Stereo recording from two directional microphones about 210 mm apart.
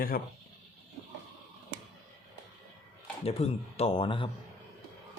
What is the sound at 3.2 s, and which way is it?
Speech, 30° left (ahead or behind).